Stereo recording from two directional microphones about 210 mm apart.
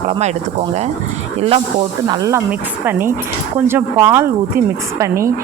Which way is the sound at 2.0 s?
15° right (ahead or behind).